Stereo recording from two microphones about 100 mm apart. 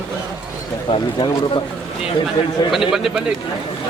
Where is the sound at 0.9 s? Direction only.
55° left (ahead or behind).